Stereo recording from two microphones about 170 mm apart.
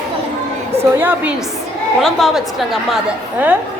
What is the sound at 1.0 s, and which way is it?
Speech, 10° right (ahead or behind).